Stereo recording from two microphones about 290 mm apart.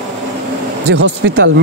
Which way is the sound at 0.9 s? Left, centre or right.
Right.